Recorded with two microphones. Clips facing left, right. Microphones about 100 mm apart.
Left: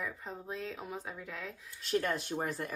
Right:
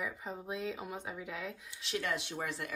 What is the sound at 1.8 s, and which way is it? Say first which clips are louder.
Speech: left 4 dB; 45° left (ahead or behind).